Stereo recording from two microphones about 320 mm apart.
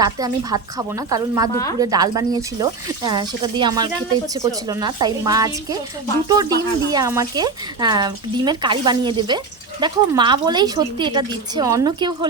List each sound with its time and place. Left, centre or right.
0.0 s speech: centre